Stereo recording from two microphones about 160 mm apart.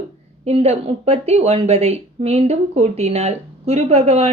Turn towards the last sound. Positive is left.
turn(degrees=-40)  # may be behind; listen again after turning